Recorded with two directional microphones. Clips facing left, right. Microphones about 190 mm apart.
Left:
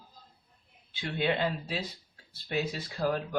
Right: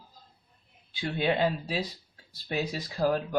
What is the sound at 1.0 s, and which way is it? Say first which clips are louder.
Speech: right 3 dB; 40° right (ahead or behind).